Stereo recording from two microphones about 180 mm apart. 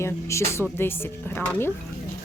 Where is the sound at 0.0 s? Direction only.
15° left (ahead or behind).